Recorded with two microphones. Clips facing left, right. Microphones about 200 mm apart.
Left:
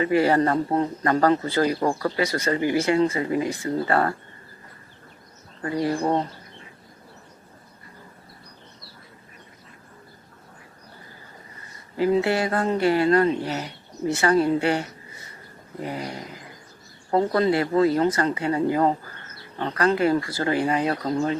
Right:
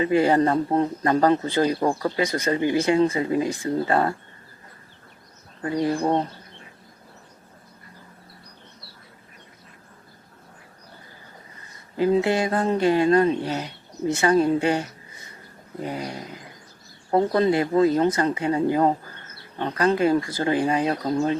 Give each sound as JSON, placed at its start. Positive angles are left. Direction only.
{"t": 0.0, "sound": "speech", "side_deg": -20}
{"t": 11.9, "sound": "speech", "side_deg": -20}